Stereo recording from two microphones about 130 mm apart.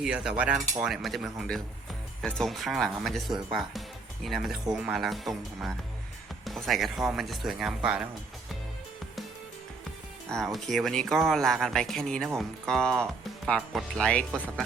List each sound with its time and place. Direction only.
0.0 s speech: 5° right (ahead or behind)
10.3 s speech: centre (ahead or behind)